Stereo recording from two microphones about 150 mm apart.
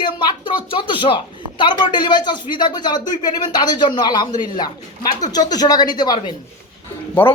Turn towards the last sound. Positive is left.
turn(degrees=15)  # may be behind; listen again after turning